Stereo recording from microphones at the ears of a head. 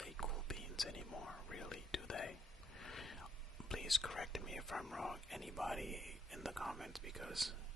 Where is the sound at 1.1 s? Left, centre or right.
Left.